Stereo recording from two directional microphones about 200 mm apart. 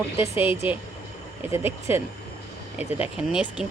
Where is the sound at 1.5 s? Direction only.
10° right (ahead or behind).